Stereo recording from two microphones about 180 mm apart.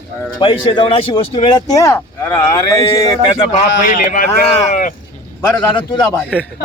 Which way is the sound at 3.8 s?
50° left (ahead or behind).